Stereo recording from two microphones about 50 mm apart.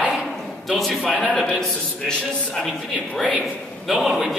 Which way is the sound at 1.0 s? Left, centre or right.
Centre.